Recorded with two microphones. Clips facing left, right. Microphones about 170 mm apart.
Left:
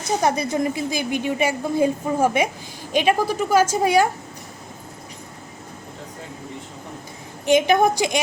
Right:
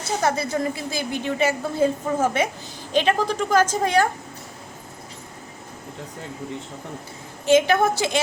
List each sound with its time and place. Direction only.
0.2 s a woman's voice: 15° left (ahead or behind)
7.4 s a woman's voice: 15° left (ahead or behind)